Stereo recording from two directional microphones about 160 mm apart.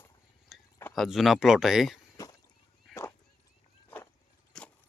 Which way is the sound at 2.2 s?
20° left (ahead or behind).